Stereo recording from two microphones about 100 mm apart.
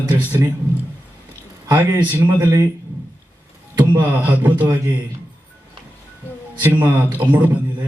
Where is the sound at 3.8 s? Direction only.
20° right (ahead or behind).